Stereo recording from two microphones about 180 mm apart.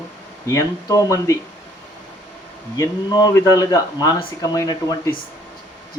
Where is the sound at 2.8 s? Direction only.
20° left (ahead or behind).